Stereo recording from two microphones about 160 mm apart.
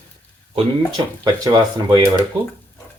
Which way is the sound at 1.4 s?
25° right (ahead or behind).